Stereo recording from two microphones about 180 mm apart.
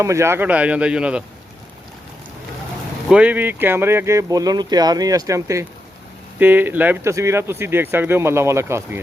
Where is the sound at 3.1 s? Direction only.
5° right (ahead or behind).